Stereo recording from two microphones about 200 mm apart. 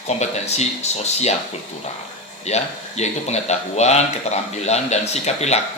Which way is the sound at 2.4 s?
35° left (ahead or behind).